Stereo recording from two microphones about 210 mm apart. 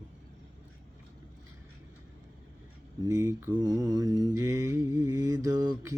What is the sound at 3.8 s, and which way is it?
Mantra, 15° right (ahead or behind).